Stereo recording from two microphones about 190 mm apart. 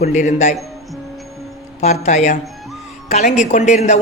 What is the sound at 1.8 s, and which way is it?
Speech, 40° left (ahead or behind).